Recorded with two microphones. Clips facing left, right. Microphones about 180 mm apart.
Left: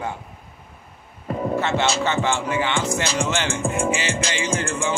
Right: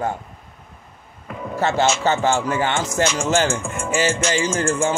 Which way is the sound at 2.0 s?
40° right (ahead or behind).